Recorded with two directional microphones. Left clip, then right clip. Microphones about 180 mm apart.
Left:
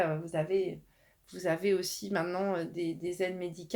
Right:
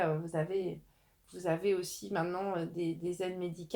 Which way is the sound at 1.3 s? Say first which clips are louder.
Left 2 dB; 35° left (ahead or behind).